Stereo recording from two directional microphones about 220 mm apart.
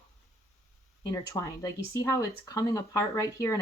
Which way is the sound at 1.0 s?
20° left (ahead or behind).